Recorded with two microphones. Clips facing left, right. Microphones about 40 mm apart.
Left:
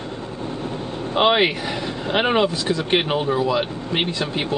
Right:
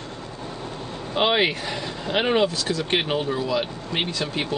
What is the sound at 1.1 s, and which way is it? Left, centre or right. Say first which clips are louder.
Speech: left 3 dB; centre.